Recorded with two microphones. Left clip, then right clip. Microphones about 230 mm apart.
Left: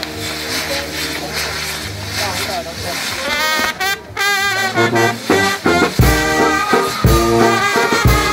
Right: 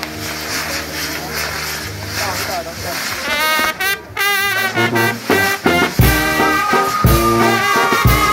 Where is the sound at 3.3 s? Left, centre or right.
Right.